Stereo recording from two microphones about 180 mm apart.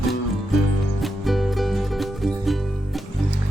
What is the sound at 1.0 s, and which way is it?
Music, centre (ahead or behind).